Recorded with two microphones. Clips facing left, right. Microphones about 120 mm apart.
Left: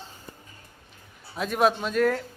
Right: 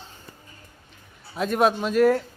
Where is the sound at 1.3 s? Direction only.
Centre (ahead or behind).